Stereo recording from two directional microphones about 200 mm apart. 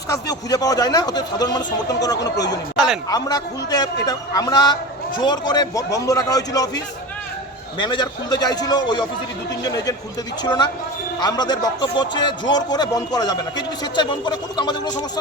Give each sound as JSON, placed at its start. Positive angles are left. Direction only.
{"t": 0.1, "sound": "speech", "side_deg": 20}
{"t": 2.7, "sound": "a sound", "side_deg": 0}
{"t": 3.1, "sound": "speech", "side_deg": 20}
{"t": 10.4, "sound": "speech", "side_deg": 20}